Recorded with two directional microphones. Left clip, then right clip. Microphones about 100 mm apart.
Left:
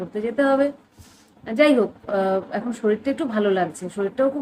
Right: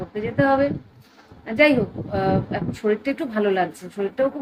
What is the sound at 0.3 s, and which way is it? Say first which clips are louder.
A woman's voice: right 1 dB; 35° left (ahead or behind).